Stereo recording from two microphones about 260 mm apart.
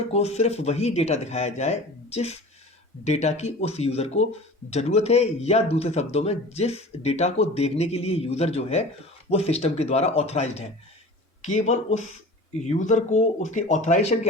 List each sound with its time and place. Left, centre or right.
0.1 s speech: left